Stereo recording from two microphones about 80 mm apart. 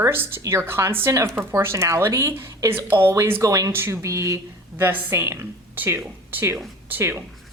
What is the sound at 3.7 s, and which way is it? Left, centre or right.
Speech, right.